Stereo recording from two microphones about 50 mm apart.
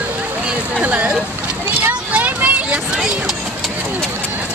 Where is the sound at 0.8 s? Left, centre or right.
Right.